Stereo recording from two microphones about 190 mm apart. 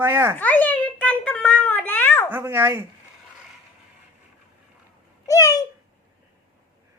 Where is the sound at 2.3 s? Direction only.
10° right (ahead or behind).